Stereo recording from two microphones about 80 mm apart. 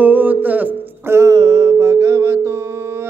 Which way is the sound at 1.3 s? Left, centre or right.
Right.